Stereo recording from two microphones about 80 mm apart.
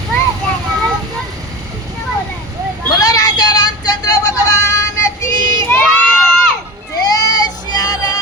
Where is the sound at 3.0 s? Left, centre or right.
Left.